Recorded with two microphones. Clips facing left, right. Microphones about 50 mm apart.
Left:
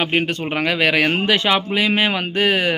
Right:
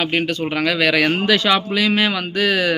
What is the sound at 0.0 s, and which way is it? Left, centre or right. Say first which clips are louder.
Speech: even; left.